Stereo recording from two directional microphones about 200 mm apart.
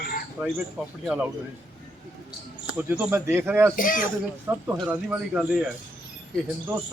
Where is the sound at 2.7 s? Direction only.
5° right (ahead or behind).